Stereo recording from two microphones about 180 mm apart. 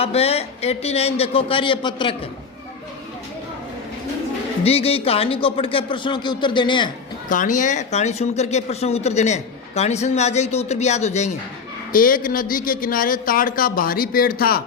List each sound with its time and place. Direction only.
0.0 s speech: 35° left (ahead or behind)
4.6 s speech: 35° left (ahead or behind)
7.3 s speech: 45° left (ahead or behind)
11.9 s a man's voice: 50° left (ahead or behind)